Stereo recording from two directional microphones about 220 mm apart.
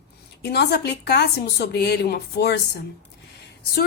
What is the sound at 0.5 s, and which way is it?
A woman's voice, 50° left (ahead or behind).